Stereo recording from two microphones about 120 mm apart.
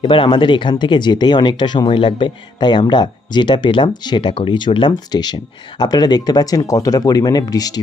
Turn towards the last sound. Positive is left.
turn(degrees=30)  # may be behind; listen again after turning